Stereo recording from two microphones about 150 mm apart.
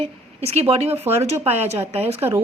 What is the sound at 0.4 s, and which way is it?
A woman's voice, 40° right (ahead or behind).